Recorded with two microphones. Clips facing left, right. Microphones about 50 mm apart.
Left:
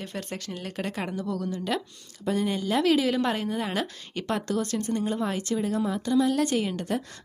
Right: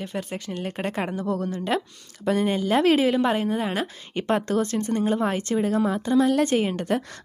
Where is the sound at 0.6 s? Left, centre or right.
Right.